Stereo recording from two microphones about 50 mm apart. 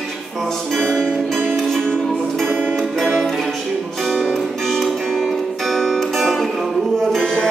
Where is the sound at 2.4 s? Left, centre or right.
Right.